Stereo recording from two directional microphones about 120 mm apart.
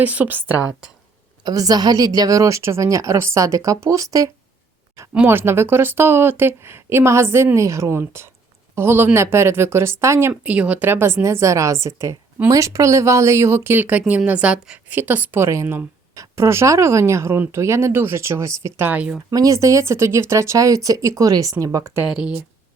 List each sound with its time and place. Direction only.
0.0 s a woman's voice: 15° right (ahead or behind)
1.5 s a woman's voice: 30° right (ahead or behind)
5.1 s a woman's voice: 20° right (ahead or behind)
19.3 s a woman's voice: 30° right (ahead or behind)
22.0 s a woman's voice: 5° right (ahead or behind)